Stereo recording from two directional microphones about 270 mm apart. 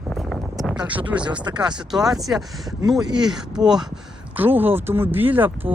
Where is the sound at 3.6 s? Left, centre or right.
Centre.